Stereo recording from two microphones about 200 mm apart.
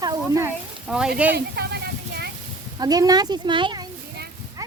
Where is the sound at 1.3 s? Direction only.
55° right (ahead or behind).